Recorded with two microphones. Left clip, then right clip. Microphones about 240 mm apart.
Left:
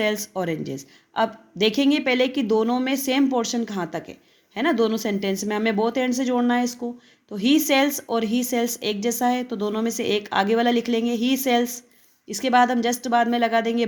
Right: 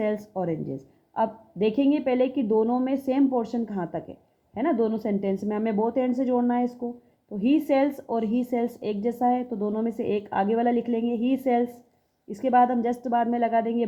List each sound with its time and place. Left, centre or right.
0.0 s a woman's voice: left
1.1 s a woman's voice: left
7.3 s a woman's voice: left